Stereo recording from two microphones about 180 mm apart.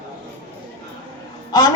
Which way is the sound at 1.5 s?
20° left (ahead or behind).